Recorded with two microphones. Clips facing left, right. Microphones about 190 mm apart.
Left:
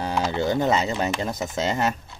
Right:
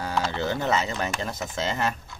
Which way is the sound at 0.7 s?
35° left (ahead or behind).